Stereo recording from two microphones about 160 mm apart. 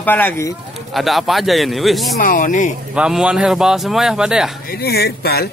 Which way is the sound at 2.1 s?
60° left (ahead or behind).